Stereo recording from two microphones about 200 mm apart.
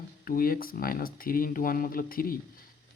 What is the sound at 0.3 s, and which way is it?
Speech, 45° left (ahead or behind).